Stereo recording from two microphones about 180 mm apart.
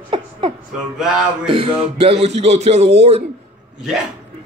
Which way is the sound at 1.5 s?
30° right (ahead or behind).